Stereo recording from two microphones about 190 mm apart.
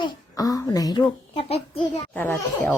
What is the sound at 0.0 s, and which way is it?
A child's voice, 20° left (ahead or behind).